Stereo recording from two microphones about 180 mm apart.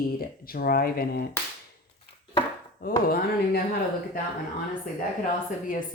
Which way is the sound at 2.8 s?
60° left (ahead or behind).